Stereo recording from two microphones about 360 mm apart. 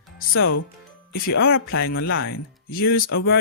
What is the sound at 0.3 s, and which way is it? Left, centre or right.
Speech, left.